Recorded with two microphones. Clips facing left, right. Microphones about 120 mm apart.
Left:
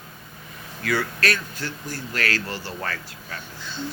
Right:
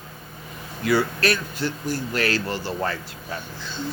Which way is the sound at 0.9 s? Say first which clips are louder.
Right 4 dB; 20° right (ahead or behind).